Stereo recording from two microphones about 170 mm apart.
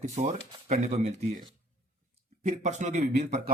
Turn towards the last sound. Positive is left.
turn(degrees=-40)  # may be behind; listen again after turning